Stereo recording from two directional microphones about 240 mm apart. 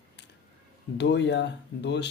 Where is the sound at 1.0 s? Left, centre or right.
Left.